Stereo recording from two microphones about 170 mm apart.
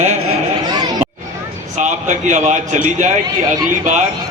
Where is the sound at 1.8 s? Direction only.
45° right (ahead or behind).